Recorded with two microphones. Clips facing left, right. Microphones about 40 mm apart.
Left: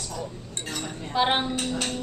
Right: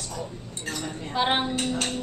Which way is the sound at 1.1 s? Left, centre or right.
Centre.